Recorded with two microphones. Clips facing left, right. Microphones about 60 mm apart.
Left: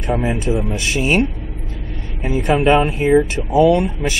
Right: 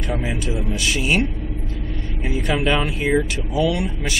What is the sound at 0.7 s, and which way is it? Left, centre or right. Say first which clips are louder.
Speech: left 3 dB; left.